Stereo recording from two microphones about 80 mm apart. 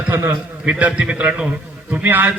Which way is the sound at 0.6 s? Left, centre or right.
Centre.